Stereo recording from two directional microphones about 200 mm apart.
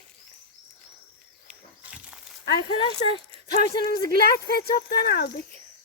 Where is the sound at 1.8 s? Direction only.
5° right (ahead or behind).